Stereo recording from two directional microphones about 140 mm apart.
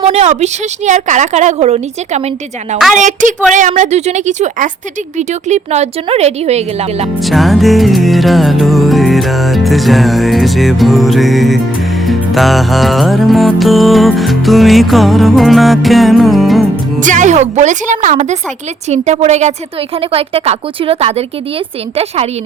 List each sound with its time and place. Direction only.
0.0 s speech: 50° right (ahead or behind)
2.9 s speech: 65° right (ahead or behind); by 7.1 s 50° right (ahead or behind)
7.3 s music: centre (ahead or behind)
17.0 s speech: 65° right (ahead or behind)
20.0 s speech: 45° right (ahead or behind)